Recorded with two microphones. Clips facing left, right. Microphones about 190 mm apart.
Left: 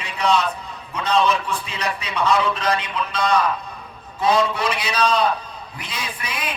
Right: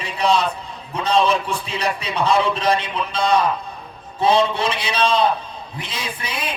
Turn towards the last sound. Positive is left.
turn(degrees=-30)  # may be behind; listen again after turning